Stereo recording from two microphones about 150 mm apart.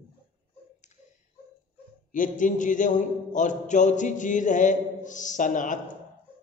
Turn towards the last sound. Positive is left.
turn(degrees=60)  # may be behind; listen again after turning